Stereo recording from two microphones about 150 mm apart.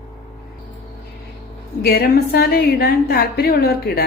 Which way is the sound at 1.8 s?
90° left.